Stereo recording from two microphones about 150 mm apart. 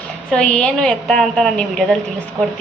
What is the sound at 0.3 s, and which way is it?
A woman's voice, 5° left (ahead or behind).